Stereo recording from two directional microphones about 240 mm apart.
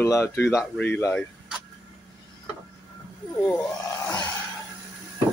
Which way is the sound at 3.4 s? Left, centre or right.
Centre.